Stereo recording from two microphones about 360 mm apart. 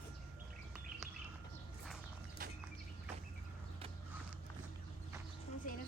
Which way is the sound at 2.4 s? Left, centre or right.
Right.